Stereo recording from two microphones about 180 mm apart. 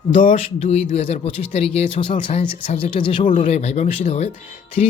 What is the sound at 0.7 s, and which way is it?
Speech, 35° left (ahead or behind).